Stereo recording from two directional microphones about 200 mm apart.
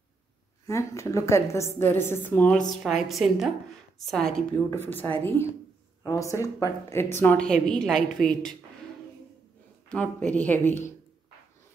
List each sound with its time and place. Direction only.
0.7 s a woman's voice: 15° left (ahead or behind)
9.8 s a woman's voice: 5° left (ahead or behind)